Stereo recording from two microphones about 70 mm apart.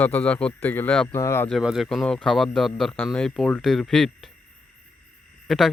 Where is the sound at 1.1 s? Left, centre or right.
Left.